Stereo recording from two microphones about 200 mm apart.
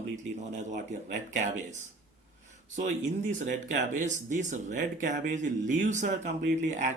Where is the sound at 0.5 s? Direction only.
35° right (ahead or behind).